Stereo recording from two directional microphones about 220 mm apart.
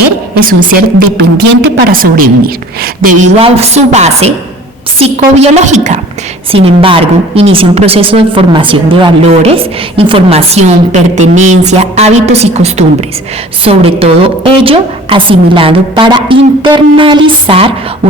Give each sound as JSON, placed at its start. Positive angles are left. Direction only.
{"t": 0.3, "sound": "a woman's voice", "side_deg": -40}
{"t": 3.3, "sound": "a woman's voice", "side_deg": -30}